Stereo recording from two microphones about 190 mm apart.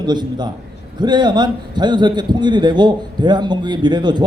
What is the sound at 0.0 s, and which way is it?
A man's voice, 20° right (ahead or behind).